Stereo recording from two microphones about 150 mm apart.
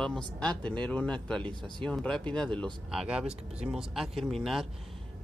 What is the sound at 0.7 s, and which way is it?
Speech, 5° left (ahead or behind).